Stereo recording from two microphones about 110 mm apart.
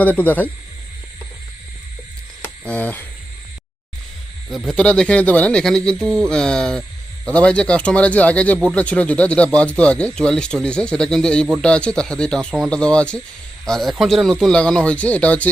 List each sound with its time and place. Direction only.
0.0 s speech: 15° left (ahead or behind)
2.4 s a sound: 15° left (ahead or behind)
4.4 s speech: centre (ahead or behind)
6.0 s mantra: 25° right (ahead or behind)
6.2 s speech: 5° left (ahead or behind)